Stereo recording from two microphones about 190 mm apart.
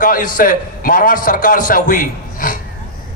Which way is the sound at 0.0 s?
45° left (ahead or behind).